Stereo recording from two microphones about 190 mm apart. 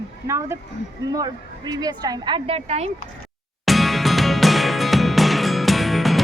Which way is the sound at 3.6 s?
Centre (ahead or behind).